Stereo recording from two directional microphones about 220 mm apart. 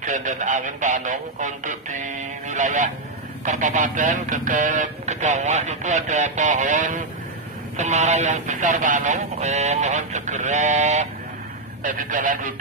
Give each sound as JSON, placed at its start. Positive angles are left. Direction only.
{"t": 0.0, "sound": "speech", "side_deg": -35}